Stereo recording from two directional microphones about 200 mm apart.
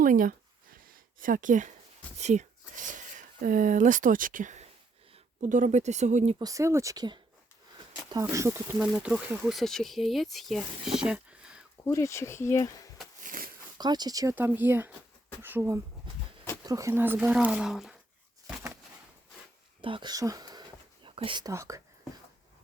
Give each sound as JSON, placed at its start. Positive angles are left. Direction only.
{"t": 0.0, "sound": "a sound", "side_deg": -40}
{"t": 1.2, "sound": "speech", "side_deg": -40}
{"t": 6.4, "sound": "speech", "side_deg": -15}
{"t": 11.9, "sound": "speech", "side_deg": 15}
{"t": 13.2, "sound": "a sound", "side_deg": -45}
{"t": 13.7, "sound": "speech", "side_deg": -20}
{"t": 19.8, "sound": "speech", "side_deg": -25}